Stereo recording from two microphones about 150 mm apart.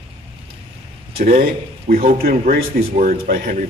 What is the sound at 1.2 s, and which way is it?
Speech, 70° right (ahead or behind).